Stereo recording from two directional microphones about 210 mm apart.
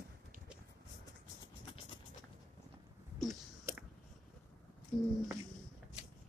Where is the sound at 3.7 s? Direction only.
10° right (ahead or behind).